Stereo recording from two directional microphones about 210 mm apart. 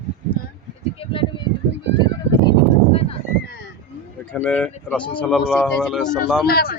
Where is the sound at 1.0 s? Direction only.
25° left (ahead or behind).